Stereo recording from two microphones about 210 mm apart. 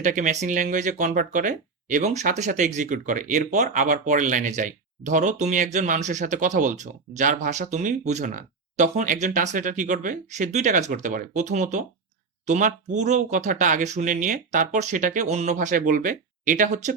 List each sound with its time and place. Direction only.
0.0 s speech: 40° right (ahead or behind)